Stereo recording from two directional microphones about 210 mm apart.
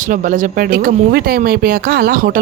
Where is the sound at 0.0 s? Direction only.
40° right (ahead or behind).